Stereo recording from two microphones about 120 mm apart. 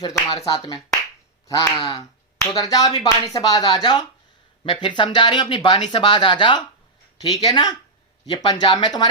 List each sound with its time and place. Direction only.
0.4 s speech: 30° left (ahead or behind)